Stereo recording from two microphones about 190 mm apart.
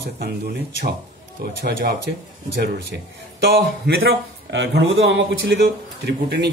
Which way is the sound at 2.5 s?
55° right (ahead or behind).